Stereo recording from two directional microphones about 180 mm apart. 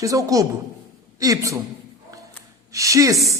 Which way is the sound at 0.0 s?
20° right (ahead or behind).